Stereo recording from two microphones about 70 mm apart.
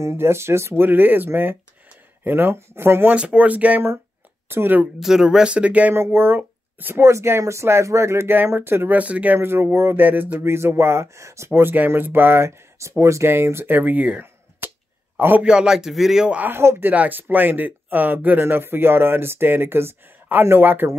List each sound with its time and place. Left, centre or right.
0.0 s speech: right
3.2 s speech: centre
4.5 s speech: right
5.0 s speech: centre
5.9 s speech: right
7.1 s speech: right
8.5 s speech: right
9.4 s speech: right
11.7 s speech: right
14.6 s a sound: right
15.1 s a man's voice: right
15.4 s speech: centre
16.3 s speech: right
16.9 s speech: right